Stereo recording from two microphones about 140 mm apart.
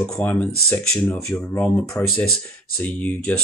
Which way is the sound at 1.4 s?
15° left (ahead or behind).